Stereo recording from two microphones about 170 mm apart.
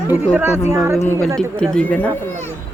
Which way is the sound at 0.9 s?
15° left (ahead or behind).